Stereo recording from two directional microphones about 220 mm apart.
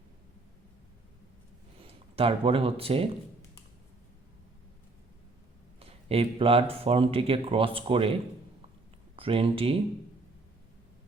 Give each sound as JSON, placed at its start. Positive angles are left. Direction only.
{"t": 1.8, "sound": "speech", "side_deg": -25}
{"t": 5.8, "sound": "speech", "side_deg": -25}
{"t": 9.1, "sound": "speech", "side_deg": -25}